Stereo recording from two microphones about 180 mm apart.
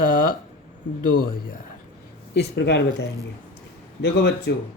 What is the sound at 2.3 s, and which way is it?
Speech, 70° left (ahead or behind).